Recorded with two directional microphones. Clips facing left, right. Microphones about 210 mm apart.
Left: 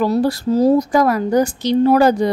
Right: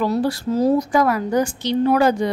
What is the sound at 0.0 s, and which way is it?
A woman's voice, 40° left (ahead or behind).